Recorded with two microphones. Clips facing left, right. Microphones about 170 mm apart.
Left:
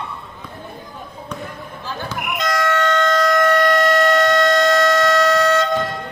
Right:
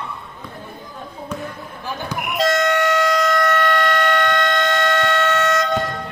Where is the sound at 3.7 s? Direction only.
40° left (ahead or behind).